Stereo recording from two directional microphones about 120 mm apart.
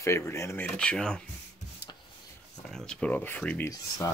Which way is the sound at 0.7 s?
10° left (ahead or behind).